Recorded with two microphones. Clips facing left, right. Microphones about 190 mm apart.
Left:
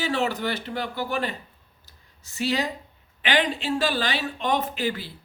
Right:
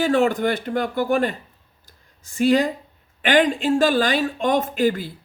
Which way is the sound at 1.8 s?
50° right (ahead or behind).